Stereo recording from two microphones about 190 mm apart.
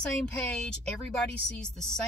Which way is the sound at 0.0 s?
5° left (ahead or behind).